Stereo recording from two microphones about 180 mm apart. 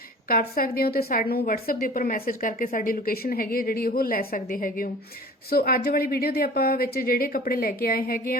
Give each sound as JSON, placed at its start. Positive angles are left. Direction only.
{"t": 0.3, "sound": "a woman's voice", "side_deg": 55}